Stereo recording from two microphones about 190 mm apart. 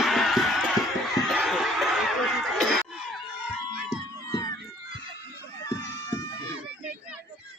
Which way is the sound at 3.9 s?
20° left (ahead or behind).